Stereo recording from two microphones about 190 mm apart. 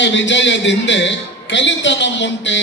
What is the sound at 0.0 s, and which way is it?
A man's voice, 70° left (ahead or behind).